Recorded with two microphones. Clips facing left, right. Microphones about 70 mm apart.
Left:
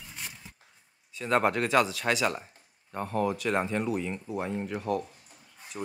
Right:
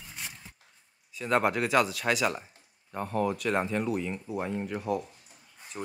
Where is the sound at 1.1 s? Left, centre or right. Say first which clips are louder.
Left 1 dB; centre.